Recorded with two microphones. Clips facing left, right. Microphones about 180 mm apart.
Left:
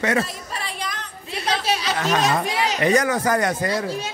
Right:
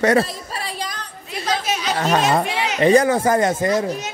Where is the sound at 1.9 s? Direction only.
35° right (ahead or behind).